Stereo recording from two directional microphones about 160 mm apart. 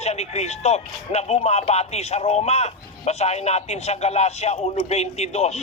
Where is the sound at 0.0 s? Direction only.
40° left (ahead or behind).